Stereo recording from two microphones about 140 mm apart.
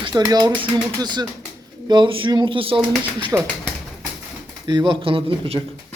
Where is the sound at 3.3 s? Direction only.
20° right (ahead or behind).